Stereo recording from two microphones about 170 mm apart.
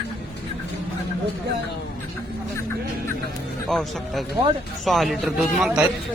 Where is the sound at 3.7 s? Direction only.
Centre (ahead or behind).